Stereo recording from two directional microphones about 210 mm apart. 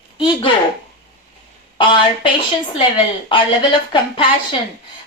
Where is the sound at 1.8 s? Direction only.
20° left (ahead or behind).